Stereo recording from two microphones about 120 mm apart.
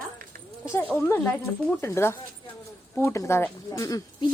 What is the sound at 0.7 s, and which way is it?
Speech, 15° left (ahead or behind).